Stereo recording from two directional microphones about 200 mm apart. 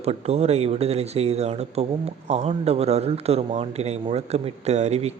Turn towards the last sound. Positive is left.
turn(degrees=-35)  # may be behind; listen again after turning